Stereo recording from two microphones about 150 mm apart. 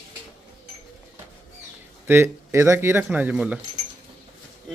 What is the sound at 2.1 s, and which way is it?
Speech, 15° right (ahead or behind).